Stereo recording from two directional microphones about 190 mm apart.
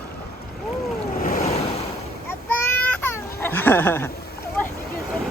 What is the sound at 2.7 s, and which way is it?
Baby cry, 10° left (ahead or behind).